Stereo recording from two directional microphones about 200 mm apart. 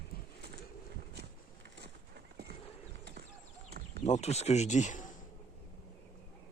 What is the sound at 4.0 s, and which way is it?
Speech, 35° left (ahead or behind).